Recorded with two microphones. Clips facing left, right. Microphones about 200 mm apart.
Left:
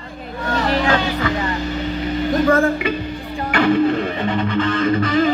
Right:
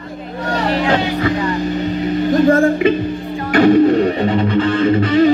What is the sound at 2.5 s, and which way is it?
Music, 35° right (ahead or behind).